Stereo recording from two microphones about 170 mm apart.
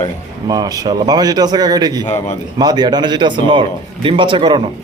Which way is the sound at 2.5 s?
25° right (ahead or behind).